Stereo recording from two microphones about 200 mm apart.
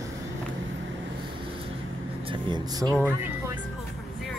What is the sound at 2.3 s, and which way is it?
Vehicle, 20° right (ahead or behind).